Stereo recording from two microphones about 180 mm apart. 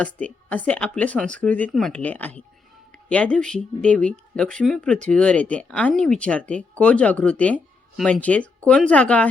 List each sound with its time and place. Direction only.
0.0 s speech: 5° left (ahead or behind)